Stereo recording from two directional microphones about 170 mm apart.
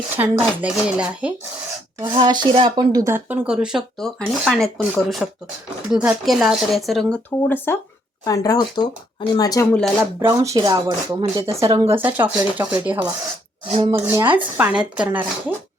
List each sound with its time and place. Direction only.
0.2 s speech: 10° right (ahead or behind)
2.0 s speech: 25° right (ahead or behind); by 9.6 s 20° left (ahead or behind)
9.7 s speech: centre (ahead or behind)
10.2 s speech: 15° right (ahead or behind)
13.7 s speech: 35° right (ahead or behind)
14.0 s speech: 15° right (ahead or behind)